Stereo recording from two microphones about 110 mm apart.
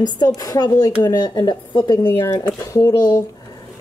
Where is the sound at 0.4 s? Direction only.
35° left (ahead or behind).